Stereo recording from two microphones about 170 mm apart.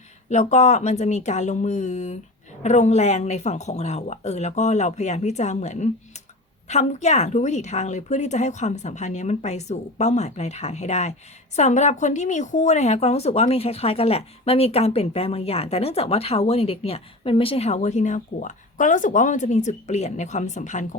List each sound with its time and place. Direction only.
0.3 s a woman's voice: 45° left (ahead or behind)